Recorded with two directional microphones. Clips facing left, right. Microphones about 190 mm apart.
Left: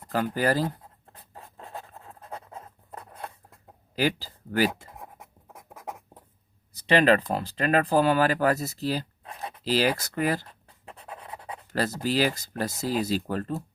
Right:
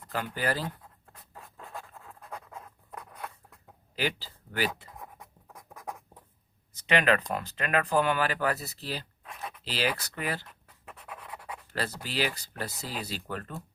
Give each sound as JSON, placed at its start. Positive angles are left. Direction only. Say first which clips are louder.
{"t": 0.1, "sound": "speech", "louder": "left 6 dB", "side_deg": 40}
{"t": 1.1, "sound": "writing", "louder": "left 3 dB", "side_deg": 30}
{"t": 3.9, "sound": "speech", "louder": "left 6 dB", "side_deg": 40}
{"t": 4.9, "sound": "writing", "louder": "left 2 dB", "side_deg": 25}
{"t": 6.7, "sound": "speech", "louder": "left 5 dB", "side_deg": 35}
{"t": 10.4, "sound": "dog", "louder": "left 3 dB", "side_deg": 30}
{"t": 11.7, "sound": "speech", "louder": "left 8 dB", "side_deg": 45}